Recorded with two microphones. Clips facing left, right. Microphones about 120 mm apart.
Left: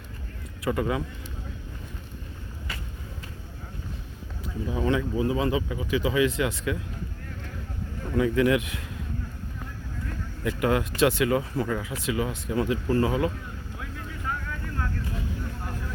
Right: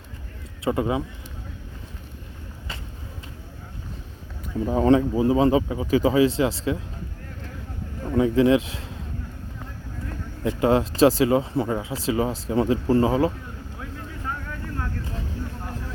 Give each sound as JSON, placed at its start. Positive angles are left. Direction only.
{"t": 0.6, "sound": "speech", "side_deg": -25}
{"t": 4.6, "sound": "speech", "side_deg": -40}
{"t": 8.0, "sound": "speech", "side_deg": -25}
{"t": 10.1, "sound": "speech", "side_deg": -25}
{"t": 14.8, "sound": "vehicle", "side_deg": -25}